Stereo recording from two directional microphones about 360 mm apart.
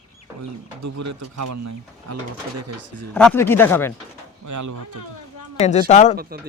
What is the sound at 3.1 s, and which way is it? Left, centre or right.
Speech, centre.